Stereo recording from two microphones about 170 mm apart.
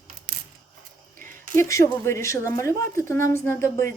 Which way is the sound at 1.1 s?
15° left (ahead or behind).